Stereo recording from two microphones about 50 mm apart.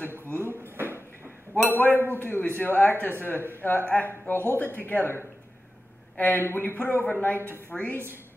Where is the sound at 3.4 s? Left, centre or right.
Right.